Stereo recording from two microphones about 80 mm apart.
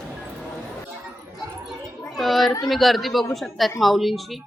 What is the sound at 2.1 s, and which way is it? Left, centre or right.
Children playing, centre.